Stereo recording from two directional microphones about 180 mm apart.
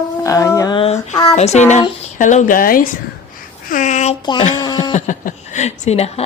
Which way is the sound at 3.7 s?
45° left (ahead or behind).